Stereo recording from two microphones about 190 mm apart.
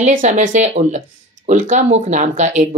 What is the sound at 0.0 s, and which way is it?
Speech, 40° right (ahead or behind).